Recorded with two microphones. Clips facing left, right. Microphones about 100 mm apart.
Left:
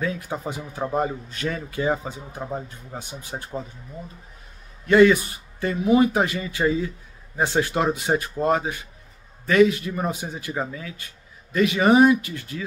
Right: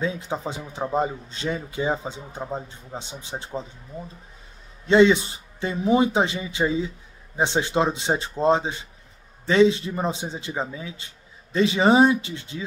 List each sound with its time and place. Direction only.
0.0 s a man's voice: 20° right (ahead or behind)
4.8 s a man's voice: 20° right (ahead or behind)